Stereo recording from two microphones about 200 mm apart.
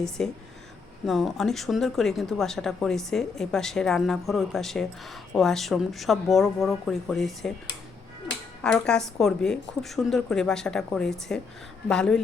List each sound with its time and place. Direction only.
0.2 s speech: 5° left (ahead or behind)
8.6 s speech: 5° left (ahead or behind)